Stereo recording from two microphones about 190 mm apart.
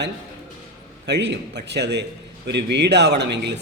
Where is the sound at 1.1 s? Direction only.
65° right (ahead or behind).